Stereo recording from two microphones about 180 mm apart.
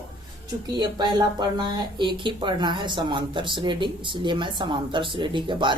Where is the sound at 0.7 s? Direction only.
25° right (ahead or behind).